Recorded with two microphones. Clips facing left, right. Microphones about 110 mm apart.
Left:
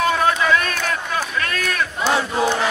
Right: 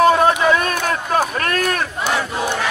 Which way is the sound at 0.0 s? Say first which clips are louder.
Right 5 dB; 35° right (ahead or behind).